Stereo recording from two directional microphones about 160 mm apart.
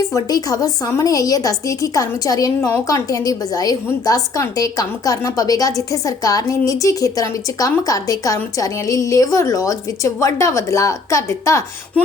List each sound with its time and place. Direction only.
0.1 s a woman's voice: 25° left (ahead or behind)